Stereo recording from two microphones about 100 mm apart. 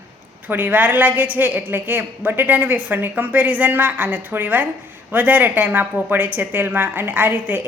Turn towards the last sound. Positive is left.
turn(degrees=-20)  # may be behind; listen again after turning